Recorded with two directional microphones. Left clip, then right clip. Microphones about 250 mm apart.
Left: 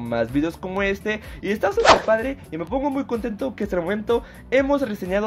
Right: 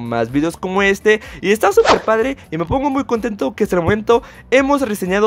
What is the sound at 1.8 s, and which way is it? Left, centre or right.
Speech, centre.